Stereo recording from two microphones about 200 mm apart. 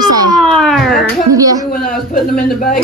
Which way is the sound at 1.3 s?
20° right (ahead or behind).